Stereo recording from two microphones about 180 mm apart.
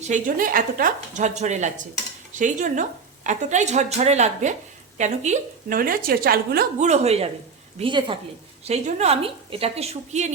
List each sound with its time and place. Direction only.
0.0 s a woman's voice: 45° right (ahead or behind)
6.7 s a woman's voice: 40° right (ahead or behind)